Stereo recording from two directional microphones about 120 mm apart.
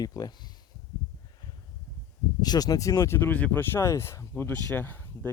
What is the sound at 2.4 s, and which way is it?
Speech, 35° left (ahead or behind).